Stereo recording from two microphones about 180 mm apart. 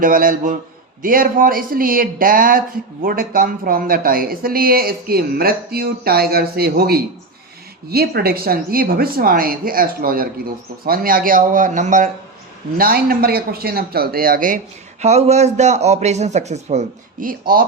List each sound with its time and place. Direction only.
0.0 s a man's voice: 50° right (ahead or behind)
12.7 s speech: 55° right (ahead or behind)
15.0 s a man's voice: 40° right (ahead or behind); by 17.7 s 55° right (ahead or behind)